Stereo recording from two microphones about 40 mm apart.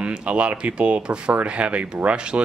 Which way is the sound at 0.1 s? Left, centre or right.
Right.